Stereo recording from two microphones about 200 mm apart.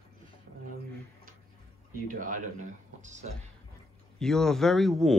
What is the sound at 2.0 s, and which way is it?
Speech, 40° right (ahead or behind).